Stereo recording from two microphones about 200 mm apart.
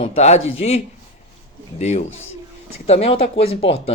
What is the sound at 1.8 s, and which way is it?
Speech, 35° left (ahead or behind).